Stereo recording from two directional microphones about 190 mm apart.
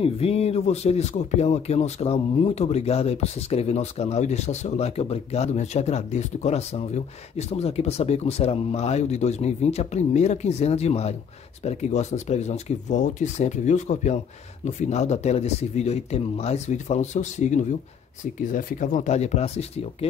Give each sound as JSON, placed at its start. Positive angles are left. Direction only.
{"t": 0.0, "sound": "speech", "side_deg": 30}